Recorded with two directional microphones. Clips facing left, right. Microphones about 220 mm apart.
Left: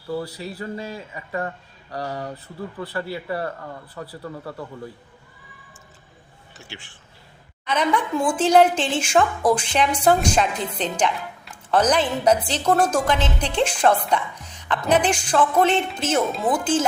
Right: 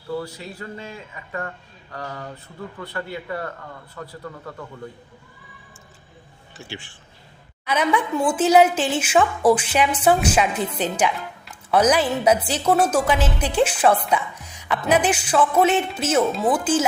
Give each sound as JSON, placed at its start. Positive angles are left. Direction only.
{"t": 0.3, "sound": "speech", "side_deg": 35}
{"t": 2.8, "sound": "speech", "side_deg": 35}
{"t": 4.0, "sound": "a man's voice", "side_deg": 20}
{"t": 7.6, "sound": "a woman's voice", "side_deg": -10}